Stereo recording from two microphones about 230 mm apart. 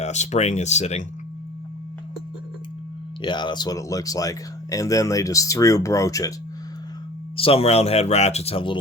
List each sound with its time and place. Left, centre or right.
0.0 s speech: left
3.2 s speech: centre
7.3 s speech: left